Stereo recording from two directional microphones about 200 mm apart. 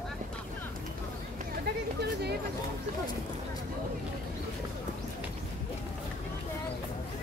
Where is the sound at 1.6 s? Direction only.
55° right (ahead or behind).